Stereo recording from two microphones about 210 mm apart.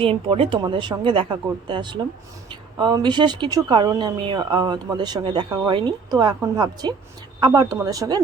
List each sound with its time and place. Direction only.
0.0 s a woman's voice: 25° right (ahead or behind)